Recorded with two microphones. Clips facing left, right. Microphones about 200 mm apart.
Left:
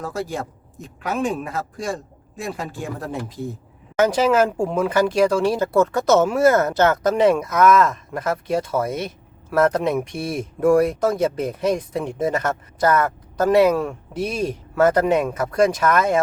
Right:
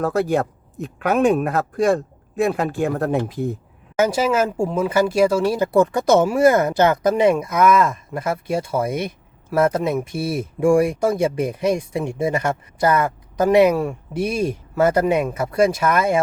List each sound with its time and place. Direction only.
0.0 s speech: 60° right (ahead or behind)
3.9 s speech: 10° right (ahead or behind)